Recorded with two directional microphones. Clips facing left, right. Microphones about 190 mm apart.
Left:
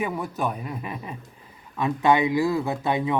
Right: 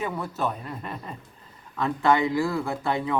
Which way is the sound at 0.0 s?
15° left (ahead or behind).